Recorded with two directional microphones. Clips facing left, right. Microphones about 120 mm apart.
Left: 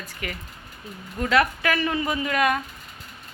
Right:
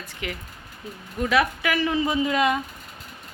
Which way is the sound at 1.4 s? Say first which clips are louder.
Left 1 dB; 10° right (ahead or behind).